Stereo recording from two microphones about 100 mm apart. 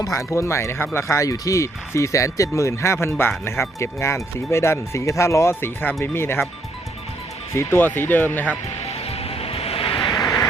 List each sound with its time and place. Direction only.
0.0 s speech: 30° left (ahead or behind)
7.5 s speech: 25° left (ahead or behind)
9.0 s music: 85° left
10.2 s vehicle: 35° left (ahead or behind)